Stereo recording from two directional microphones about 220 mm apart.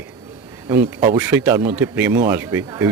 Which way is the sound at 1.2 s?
10° right (ahead or behind).